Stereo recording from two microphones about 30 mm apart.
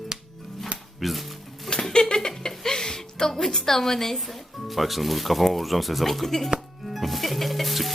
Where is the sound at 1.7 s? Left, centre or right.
Left.